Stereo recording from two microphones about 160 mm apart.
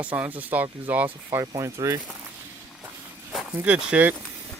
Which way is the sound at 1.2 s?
25° right (ahead or behind).